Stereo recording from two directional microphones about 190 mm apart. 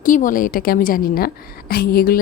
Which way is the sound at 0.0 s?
45° left (ahead or behind).